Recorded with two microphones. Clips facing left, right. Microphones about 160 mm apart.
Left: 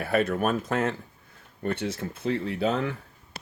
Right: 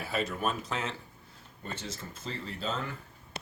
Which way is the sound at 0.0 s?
60° left (ahead or behind).